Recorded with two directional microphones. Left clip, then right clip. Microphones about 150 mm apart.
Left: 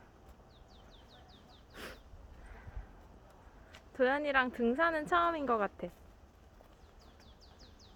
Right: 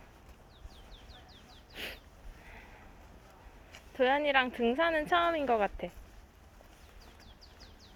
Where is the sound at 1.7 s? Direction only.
25° left (ahead or behind).